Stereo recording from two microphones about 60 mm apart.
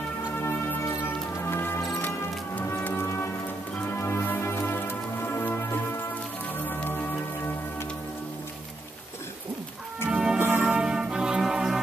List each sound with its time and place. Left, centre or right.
0.4 s music: left
2.0 s music: left
10.0 s music: centre
10.6 s brass instrument: centre